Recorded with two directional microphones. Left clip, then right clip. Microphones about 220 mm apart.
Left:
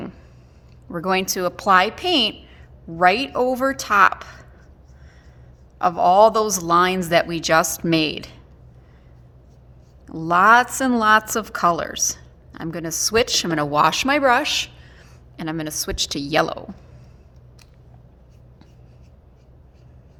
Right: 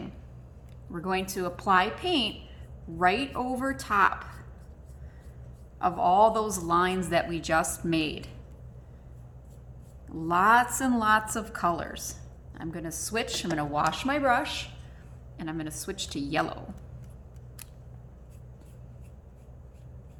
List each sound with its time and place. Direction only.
0.9 s a woman's voice: 50° left (ahead or behind)
5.8 s a woman's voice: 50° left (ahead or behind)
10.1 s a woman's voice: 45° left (ahead or behind)